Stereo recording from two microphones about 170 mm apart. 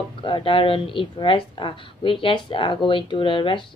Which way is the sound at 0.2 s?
30° left (ahead or behind).